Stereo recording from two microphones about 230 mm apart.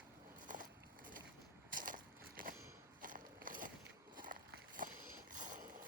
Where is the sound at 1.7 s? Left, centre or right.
Right.